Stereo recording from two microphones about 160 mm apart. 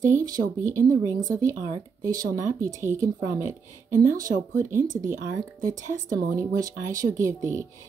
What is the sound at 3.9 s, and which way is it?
Speech, 25° right (ahead or behind).